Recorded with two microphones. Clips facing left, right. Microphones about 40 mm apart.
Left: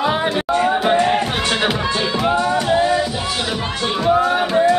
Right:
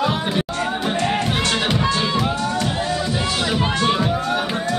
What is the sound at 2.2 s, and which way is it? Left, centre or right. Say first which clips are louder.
Music: left 5 dB; left.